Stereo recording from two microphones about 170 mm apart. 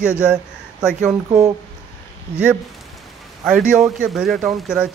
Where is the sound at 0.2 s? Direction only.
5° right (ahead or behind).